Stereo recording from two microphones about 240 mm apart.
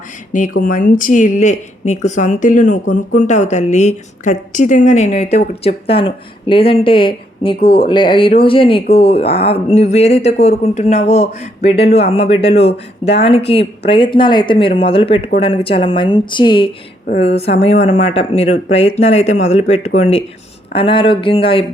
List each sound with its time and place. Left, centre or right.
0.3 s speech: left